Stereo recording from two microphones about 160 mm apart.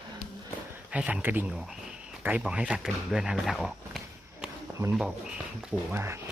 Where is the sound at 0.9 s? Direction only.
10° right (ahead or behind).